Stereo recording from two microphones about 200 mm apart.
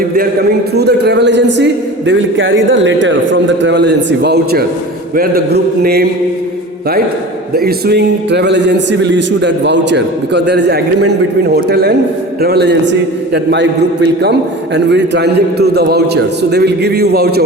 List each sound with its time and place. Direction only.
0.7 s a man's voice: 55° right (ahead or behind)
7.5 s a man's voice: 50° right (ahead or behind)